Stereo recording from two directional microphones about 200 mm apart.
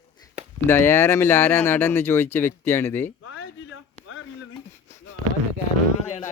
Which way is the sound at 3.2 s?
90° left.